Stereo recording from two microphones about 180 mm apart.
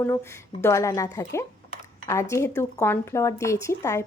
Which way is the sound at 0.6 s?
15° left (ahead or behind).